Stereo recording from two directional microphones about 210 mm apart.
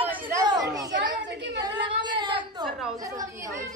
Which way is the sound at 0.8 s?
55° right (ahead or behind).